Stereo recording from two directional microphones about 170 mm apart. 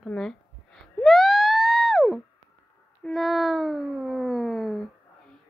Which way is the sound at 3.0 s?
Centre (ahead or behind).